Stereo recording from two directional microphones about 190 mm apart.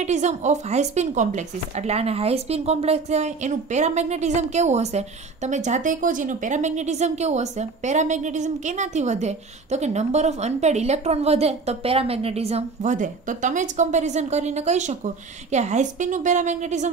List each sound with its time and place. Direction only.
0.0 s speech: 35° right (ahead or behind)